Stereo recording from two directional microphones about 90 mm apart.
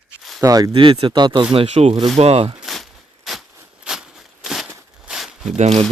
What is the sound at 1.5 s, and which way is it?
Speech, 90° right.